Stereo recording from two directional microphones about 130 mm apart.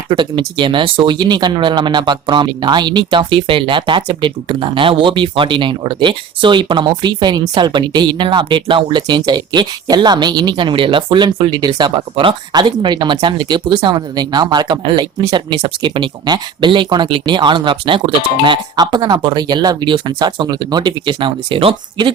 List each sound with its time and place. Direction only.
0.1 s speech: 40° right (ahead or behind)